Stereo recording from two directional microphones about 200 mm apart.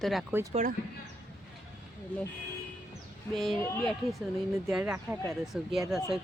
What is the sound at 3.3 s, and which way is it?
Speech, centre (ahead or behind).